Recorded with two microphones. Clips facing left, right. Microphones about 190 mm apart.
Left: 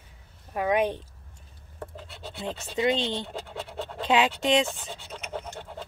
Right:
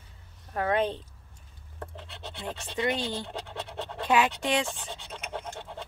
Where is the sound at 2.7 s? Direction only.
25° left (ahead or behind).